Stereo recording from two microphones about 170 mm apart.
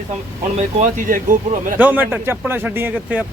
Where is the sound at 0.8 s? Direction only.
50° right (ahead or behind).